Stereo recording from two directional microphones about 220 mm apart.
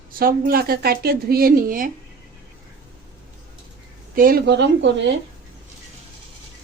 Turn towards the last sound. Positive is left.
turn(degrees=-50)  # may be behind; listen again after turning